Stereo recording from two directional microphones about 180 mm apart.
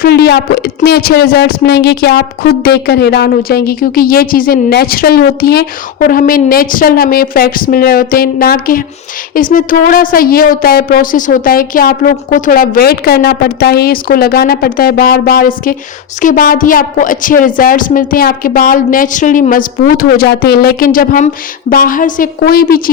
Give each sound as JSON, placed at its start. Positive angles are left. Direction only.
{"t": 0.0, "sound": "a woman's voice", "side_deg": 65}